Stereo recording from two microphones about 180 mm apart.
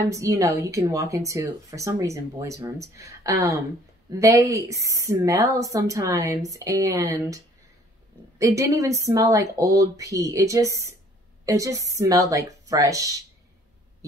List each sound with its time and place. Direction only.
0.1 s a woman's voice: 15° right (ahead or behind)